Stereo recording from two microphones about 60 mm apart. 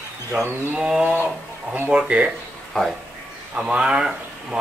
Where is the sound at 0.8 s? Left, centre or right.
Centre.